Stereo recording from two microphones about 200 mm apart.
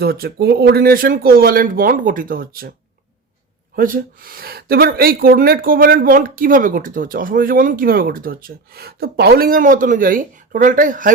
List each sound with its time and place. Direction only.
0.0 s speech: 50° right (ahead or behind)
3.8 s speech: 45° right (ahead or behind)